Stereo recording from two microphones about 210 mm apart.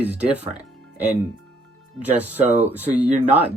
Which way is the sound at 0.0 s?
5° right (ahead or behind).